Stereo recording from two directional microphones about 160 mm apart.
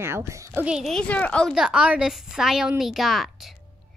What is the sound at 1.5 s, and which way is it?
Speech, 5° right (ahead or behind).